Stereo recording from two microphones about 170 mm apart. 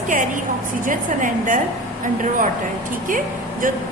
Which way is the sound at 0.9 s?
50° right (ahead or behind).